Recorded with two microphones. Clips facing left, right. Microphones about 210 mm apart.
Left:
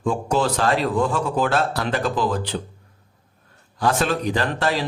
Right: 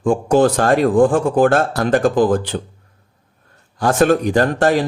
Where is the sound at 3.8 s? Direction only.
50° right (ahead or behind).